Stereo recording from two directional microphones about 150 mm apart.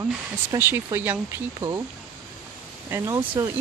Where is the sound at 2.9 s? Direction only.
20° right (ahead or behind).